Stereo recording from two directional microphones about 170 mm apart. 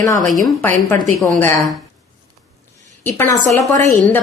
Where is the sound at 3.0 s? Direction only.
10° left (ahead or behind).